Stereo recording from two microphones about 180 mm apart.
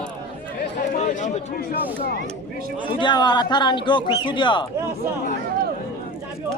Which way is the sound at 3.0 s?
25° left (ahead or behind).